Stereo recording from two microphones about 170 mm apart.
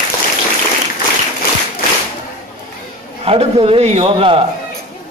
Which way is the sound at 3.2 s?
35° right (ahead or behind).